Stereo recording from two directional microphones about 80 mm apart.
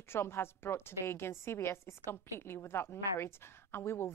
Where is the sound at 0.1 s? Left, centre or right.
Left.